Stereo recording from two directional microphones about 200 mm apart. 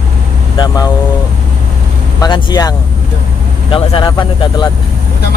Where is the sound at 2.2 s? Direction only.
20° left (ahead or behind).